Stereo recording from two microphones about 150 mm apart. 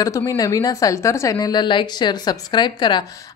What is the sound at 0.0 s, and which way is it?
A woman's voice, 20° left (ahead or behind).